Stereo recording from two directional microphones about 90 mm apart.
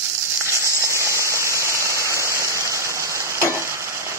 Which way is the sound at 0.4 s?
30° right (ahead or behind).